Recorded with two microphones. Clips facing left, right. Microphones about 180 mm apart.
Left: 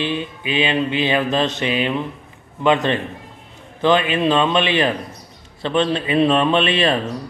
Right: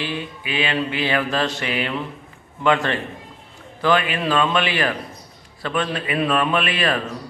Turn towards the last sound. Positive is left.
turn(degrees=25)  # may be behind; listen again after turning